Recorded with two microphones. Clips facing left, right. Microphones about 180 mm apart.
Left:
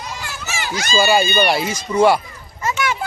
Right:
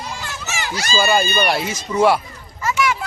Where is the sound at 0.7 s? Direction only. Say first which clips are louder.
Left 2 dB; centre (ahead or behind).